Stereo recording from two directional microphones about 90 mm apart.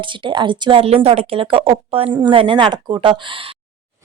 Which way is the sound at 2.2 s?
70° right (ahead or behind).